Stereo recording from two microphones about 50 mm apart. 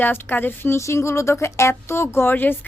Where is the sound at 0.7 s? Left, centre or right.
Left.